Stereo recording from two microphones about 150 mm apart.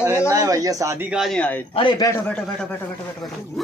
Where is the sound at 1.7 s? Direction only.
30° left (ahead or behind).